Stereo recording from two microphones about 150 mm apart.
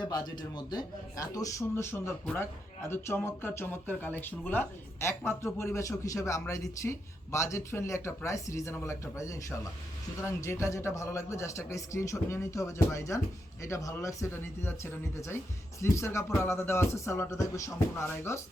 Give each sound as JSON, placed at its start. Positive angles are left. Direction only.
{"t": 0.0, "sound": "speech", "side_deg": 25}
{"t": 15.8, "sound": "speech", "side_deg": 20}